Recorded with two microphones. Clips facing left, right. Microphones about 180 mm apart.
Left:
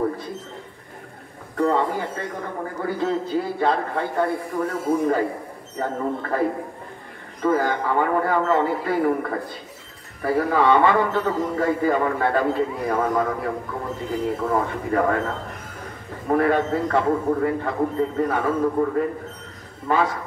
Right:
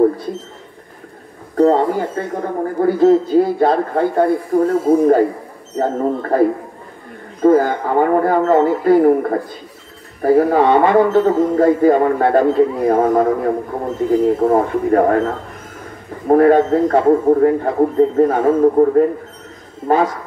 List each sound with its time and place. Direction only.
1.6 s a man's voice: 40° right (ahead or behind)
7.4 s a man's voice: 45° right (ahead or behind)
16.3 s a man's voice: 40° right (ahead or behind)